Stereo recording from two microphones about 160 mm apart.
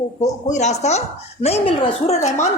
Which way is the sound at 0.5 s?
45° left (ahead or behind).